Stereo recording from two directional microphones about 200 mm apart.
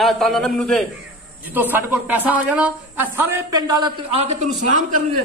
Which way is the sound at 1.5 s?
10° right (ahead or behind).